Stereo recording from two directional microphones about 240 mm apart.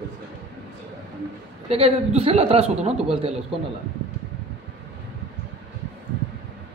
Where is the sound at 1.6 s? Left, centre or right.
Right.